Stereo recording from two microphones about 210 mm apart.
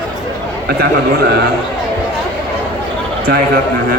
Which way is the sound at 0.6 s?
50° right (ahead or behind).